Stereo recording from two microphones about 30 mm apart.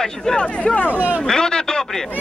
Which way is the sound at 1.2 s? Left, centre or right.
Left.